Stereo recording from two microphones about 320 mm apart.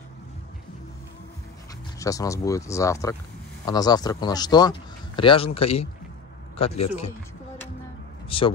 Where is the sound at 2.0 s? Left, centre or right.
Centre.